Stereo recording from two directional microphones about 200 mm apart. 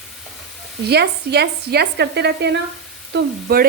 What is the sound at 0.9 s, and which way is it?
Speech, 55° right (ahead or behind).